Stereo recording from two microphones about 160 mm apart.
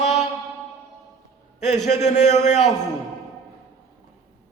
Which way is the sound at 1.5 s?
45° left (ahead or behind).